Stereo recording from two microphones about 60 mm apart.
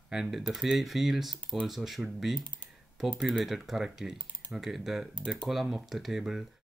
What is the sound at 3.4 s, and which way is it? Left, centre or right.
Speech, centre.